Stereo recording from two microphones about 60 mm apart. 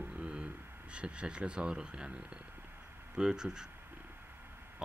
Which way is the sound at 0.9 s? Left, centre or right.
Centre.